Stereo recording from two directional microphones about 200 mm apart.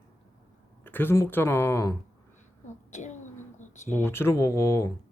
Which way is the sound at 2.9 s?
35° left (ahead or behind).